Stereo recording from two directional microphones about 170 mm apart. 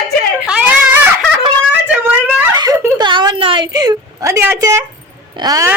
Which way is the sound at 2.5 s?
25° right (ahead or behind).